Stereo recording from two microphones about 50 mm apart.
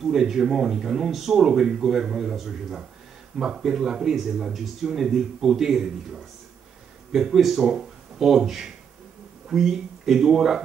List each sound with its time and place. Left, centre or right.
0.0 s speech: centre